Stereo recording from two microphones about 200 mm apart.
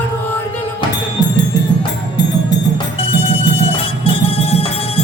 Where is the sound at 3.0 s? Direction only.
30° left (ahead or behind).